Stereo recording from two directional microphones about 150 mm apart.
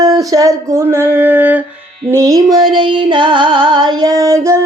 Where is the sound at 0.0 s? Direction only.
25° right (ahead or behind).